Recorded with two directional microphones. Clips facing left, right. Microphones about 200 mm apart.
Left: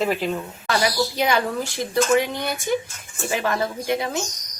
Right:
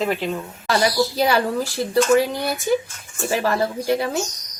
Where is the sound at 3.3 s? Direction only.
35° right (ahead or behind).